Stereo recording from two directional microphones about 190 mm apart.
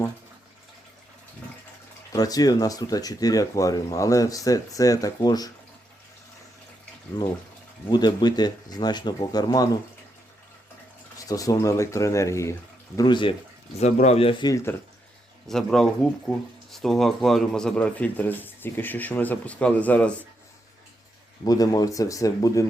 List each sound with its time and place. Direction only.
2.1 s speech: 20° left (ahead or behind)
7.9 s speech: 20° left (ahead or behind)
11.3 s speech: 20° left (ahead or behind)
13.7 s speech: 35° left (ahead or behind); by 14.8 s 15° left (ahead or behind)
15.4 s speech: centre (ahead or behind)
21.4 s speech: 20° left (ahead or behind)